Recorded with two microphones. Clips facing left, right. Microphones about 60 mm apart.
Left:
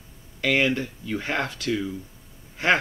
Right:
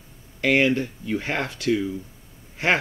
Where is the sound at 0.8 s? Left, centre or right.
Centre.